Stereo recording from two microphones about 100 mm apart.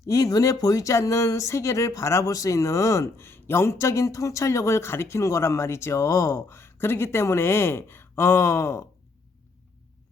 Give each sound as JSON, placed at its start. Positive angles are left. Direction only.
{"t": 0.0, "sound": "speech", "side_deg": 35}